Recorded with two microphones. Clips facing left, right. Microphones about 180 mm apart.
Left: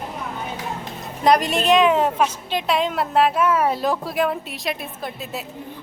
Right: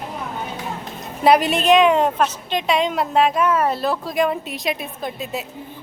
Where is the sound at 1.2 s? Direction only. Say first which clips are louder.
Right 2 dB; 5° right (ahead or behind).